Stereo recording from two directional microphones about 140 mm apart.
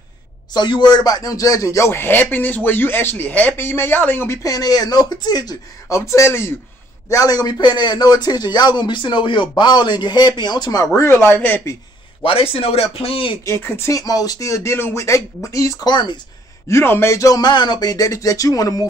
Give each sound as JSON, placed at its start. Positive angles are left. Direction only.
{"t": 0.5, "sound": "a man's voice", "side_deg": 30}
{"t": 12.2, "sound": "a man's voice", "side_deg": 40}
{"t": 13.5, "sound": "speech", "side_deg": 15}
{"t": 16.6, "sound": "speech", "side_deg": 20}